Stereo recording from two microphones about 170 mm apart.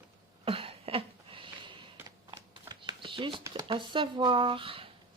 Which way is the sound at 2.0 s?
25° right (ahead or behind).